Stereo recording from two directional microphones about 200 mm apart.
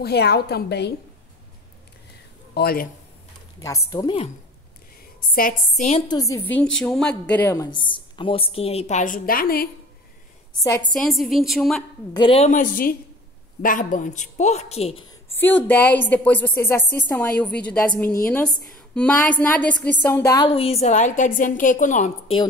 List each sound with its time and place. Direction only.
0.0 s a woman's voice: 55° left (ahead or behind)
2.5 s speech: 50° left (ahead or behind)
3.6 s a woman's voice: 15° left (ahead or behind)
5.3 s a woman's voice: 40° left (ahead or behind)
5.9 s a woman's voice: 20° left (ahead or behind)
6.8 s a woman's voice: 5° left (ahead or behind); by 9.7 s 45° left (ahead or behind)
10.6 s a woman's voice: 15° left (ahead or behind)
10.9 s a woman's voice: centre (ahead or behind)
12.1 s a woman's voice: 25° left (ahead or behind)
15.3 s a woman's voice: 10° left (ahead or behind); by 22.1 s 40° left (ahead or behind)